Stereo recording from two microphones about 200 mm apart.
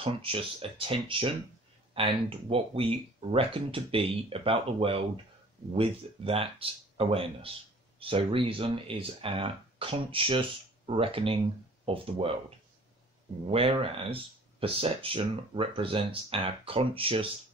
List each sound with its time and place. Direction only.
0.0 s speech: 25° right (ahead or behind)